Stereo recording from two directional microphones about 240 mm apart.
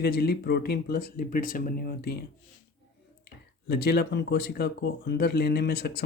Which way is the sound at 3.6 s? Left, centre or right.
Left.